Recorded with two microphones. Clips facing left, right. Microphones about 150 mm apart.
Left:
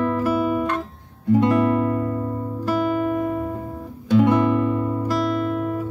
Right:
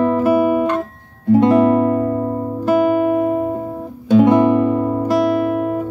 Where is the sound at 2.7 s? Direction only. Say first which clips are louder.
Right 7 dB; 20° right (ahead or behind).